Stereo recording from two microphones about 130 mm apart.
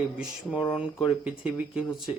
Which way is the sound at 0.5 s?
40° left (ahead or behind).